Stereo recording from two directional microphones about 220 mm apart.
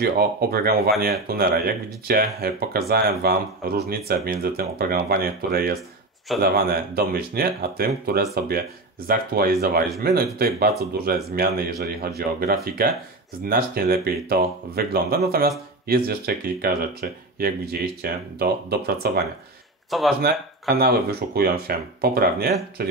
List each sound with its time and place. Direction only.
0.0 s speech: 45° right (ahead or behind)
19.9 s speech: centre (ahead or behind)
20.2 s speech: 45° right (ahead or behind)